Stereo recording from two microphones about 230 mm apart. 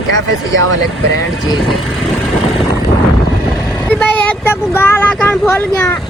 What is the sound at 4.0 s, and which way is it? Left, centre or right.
Speech, centre.